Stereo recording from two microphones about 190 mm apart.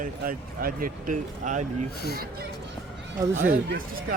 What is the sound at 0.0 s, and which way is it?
Speech, 45° right (ahead or behind).